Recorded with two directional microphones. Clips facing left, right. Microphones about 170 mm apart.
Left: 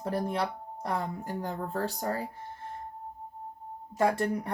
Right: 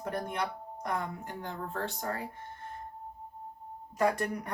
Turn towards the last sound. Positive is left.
turn(degrees=30)  # may be behind; listen again after turning